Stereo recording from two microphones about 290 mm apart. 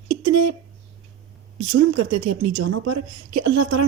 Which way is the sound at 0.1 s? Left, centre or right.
Right.